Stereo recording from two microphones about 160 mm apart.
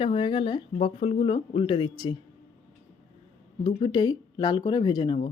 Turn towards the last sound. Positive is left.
turn(degrees=30)  # may be behind; listen again after turning